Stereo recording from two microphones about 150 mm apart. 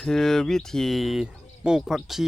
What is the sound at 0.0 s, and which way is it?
Speech, 5° left (ahead or behind).